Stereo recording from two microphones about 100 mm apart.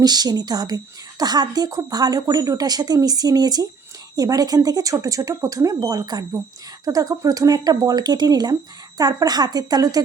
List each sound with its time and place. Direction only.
0.0 s a woman's voice: 40° right (ahead or behind)